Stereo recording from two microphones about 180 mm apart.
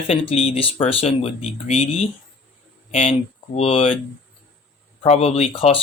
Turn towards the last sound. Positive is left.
turn(degrees=35)  # may be behind; listen again after turning